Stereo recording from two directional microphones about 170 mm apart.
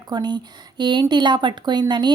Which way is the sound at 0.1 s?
25° right (ahead or behind).